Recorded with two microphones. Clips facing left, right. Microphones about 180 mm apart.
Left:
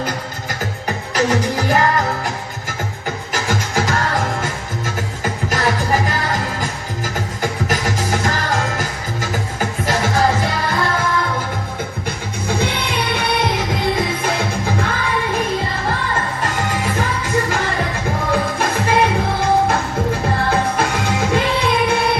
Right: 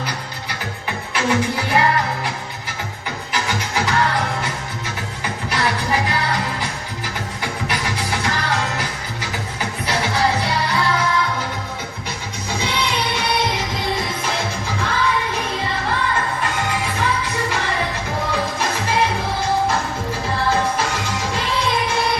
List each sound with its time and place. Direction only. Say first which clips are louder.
0.9 s music: left 3 dB; 40° left (ahead or behind)
14.8 s music: left 1 dB; 50° left (ahead or behind)
16.4 s music: left 2 dB; 45° left (ahead or behind)
18.3 s music: left 5 dB; 55° left (ahead or behind)